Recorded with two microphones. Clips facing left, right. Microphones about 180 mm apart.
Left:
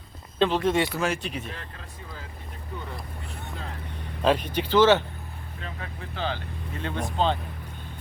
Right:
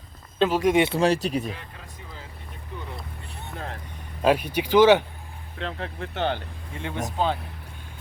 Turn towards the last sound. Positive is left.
turn(degrees=-10)  # may be behind; listen again after turning